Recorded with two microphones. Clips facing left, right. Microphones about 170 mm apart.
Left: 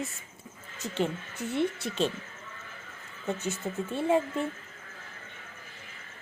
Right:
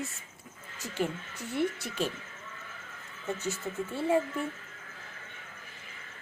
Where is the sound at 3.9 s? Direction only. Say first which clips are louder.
Left 2 dB; 20° left (ahead or behind).